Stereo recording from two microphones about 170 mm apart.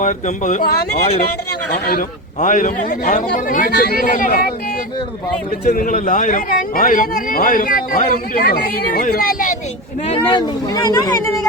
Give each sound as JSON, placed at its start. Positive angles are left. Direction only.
{"t": 0.0, "sound": "a man's voice", "side_deg": 45}
{"t": 1.7, "sound": "a man's voice", "side_deg": 55}
{"t": 5.6, "sound": "a man's voice", "side_deg": 55}
{"t": 10.1, "sound": "speech", "side_deg": 25}